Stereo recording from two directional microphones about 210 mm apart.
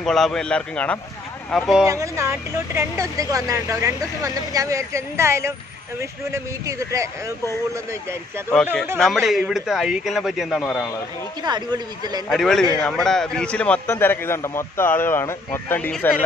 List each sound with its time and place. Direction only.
0.0 s a man's voice: centre (ahead or behind)
1.9 s speech: 15° right (ahead or behind)
8.9 s a man's voice: centre (ahead or behind)
11.4 s speech: 20° right (ahead or behind)
12.3 s a man's voice: centre (ahead or behind)